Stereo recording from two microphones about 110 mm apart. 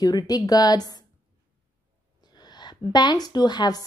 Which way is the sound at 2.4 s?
40° left (ahead or behind).